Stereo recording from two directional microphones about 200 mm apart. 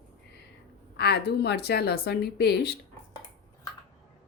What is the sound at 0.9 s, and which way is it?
A woman's voice, 55° left (ahead or behind).